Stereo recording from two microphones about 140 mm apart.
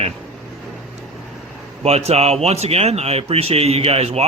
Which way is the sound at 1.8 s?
45° right (ahead or behind).